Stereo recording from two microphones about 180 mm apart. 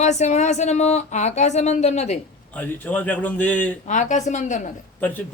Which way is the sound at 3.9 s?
45° left (ahead or behind).